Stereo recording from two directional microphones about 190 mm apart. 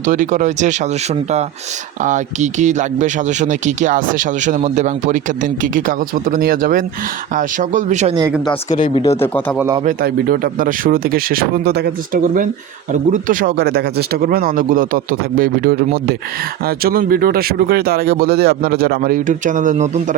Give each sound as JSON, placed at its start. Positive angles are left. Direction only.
{"t": 0.0, "sound": "speech", "side_deg": -40}
{"t": 2.0, "sound": "speech", "side_deg": -40}
{"t": 9.2, "sound": "a man's voice", "side_deg": 10}
{"t": 9.8, "sound": "speech", "side_deg": -50}